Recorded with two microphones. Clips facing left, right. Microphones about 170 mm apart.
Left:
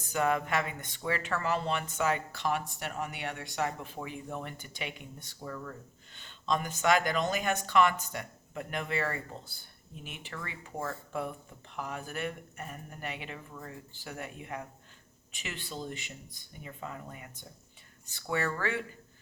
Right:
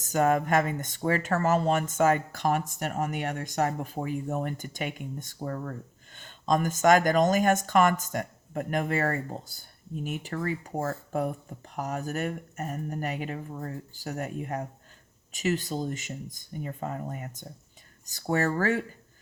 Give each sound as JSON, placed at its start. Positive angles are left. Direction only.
{"t": 0.0, "sound": "speech", "side_deg": -40}